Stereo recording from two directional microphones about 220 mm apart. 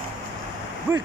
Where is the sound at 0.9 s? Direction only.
10° right (ahead or behind).